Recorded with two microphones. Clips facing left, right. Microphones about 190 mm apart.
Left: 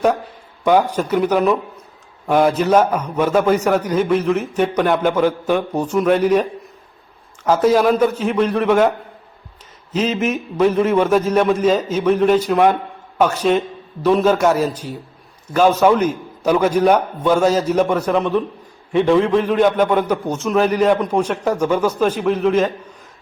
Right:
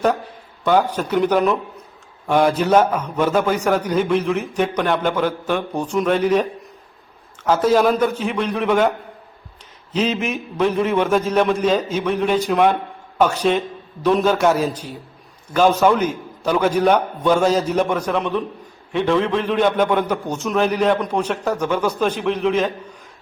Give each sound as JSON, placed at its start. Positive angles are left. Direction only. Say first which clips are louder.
{"t": 0.6, "sound": "a man's voice", "louder": "left 2 dB", "side_deg": 10}
{"t": 8.1, "sound": "a man's voice", "louder": "left 3 dB", "side_deg": 40}
{"t": 8.4, "sound": "a man's voice", "louder": "left 3 dB", "side_deg": 0}
{"t": 9.9, "sound": "a man's voice", "louder": "left 2 dB", "side_deg": 5}
{"t": 15.8, "sound": "a man's voice", "louder": "left 2 dB", "side_deg": 0}